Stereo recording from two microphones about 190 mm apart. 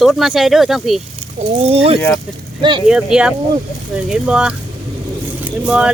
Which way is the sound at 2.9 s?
5° right (ahead or behind).